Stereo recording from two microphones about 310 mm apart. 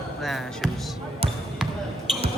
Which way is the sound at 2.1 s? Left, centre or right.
Centre.